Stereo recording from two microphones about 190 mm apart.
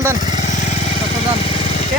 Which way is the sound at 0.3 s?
40° left (ahead or behind).